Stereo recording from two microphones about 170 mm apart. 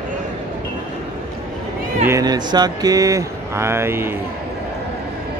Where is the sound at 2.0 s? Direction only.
20° right (ahead or behind).